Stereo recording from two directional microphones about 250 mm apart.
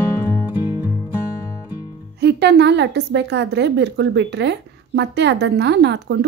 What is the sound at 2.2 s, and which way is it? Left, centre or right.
A woman's voice, right.